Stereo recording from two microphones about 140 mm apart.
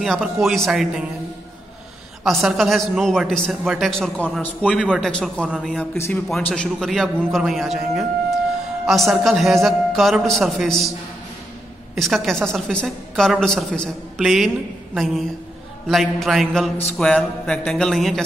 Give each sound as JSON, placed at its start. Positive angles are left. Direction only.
{"t": 0.0, "sound": "a woman's voice", "side_deg": 0}
{"t": 2.2, "sound": "a woman's voice", "side_deg": 0}
{"t": 5.5, "sound": "a woman's voice", "side_deg": -5}
{"t": 5.9, "sound": "a man's voice", "side_deg": 20}
{"t": 6.5, "sound": "a woman's voice", "side_deg": 5}
{"t": 11.9, "sound": "a woman's voice", "side_deg": 0}